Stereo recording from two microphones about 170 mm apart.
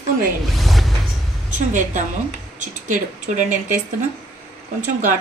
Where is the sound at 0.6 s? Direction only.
Centre (ahead or behind).